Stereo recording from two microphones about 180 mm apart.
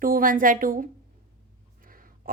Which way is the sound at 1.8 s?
50° right (ahead or behind).